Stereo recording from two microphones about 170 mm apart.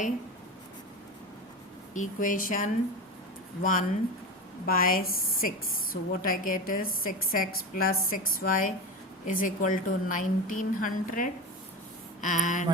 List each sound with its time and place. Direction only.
1.9 s a woman's voice: 50° left (ahead or behind)